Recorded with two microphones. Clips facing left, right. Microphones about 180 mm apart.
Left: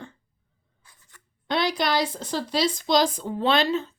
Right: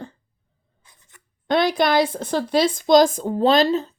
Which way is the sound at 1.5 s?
50° right (ahead or behind).